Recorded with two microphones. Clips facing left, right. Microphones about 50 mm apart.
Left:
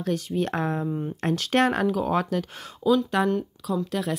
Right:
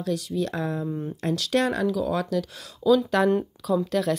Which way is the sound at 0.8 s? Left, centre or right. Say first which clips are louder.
Left 1 dB; centre.